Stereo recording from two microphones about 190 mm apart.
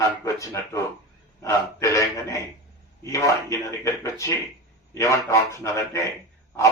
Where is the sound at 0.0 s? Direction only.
15° left (ahead or behind).